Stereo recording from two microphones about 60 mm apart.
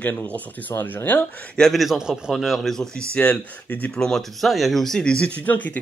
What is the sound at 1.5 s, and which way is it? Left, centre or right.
Speech, centre.